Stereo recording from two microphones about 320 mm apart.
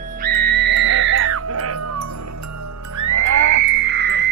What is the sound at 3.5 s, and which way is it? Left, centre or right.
Music, right.